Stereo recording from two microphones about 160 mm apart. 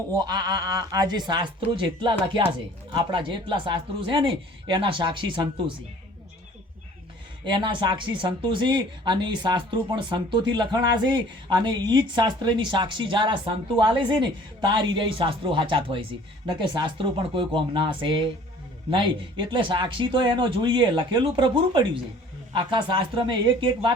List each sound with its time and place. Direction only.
0.1 s speech: 25° right (ahead or behind)
7.4 s speech: 30° right (ahead or behind)